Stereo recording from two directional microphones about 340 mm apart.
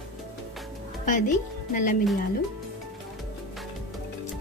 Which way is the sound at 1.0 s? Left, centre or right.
Left.